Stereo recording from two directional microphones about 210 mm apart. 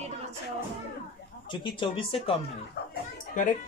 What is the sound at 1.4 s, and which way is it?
Speech, 20° left (ahead or behind).